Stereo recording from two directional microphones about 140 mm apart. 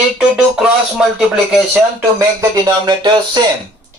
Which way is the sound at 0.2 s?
5° right (ahead or behind).